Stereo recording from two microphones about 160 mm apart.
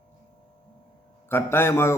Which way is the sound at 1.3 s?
15° left (ahead or behind).